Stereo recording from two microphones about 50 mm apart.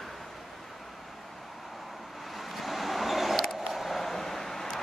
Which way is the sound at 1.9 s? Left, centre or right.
Centre.